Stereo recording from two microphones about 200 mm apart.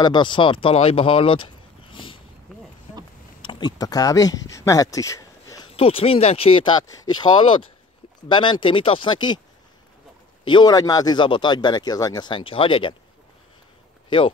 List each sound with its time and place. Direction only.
0.0 s speech: 20° left (ahead or behind)
3.4 s speech: 20° left (ahead or behind)
4.5 s a sound: 15° left (ahead or behind)
5.7 s speech: 25° left (ahead or behind)
10.4 s speech: 20° left (ahead or behind)
14.0 s speech: 25° left (ahead or behind)